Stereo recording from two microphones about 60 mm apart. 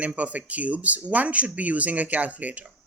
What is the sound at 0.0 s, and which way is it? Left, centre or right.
Speech, right.